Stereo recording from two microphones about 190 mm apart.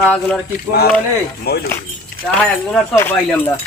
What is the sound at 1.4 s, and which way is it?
Speech, 55° left (ahead or behind).